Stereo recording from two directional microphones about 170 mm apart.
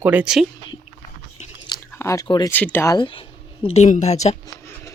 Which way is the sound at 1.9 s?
15° left (ahead or behind).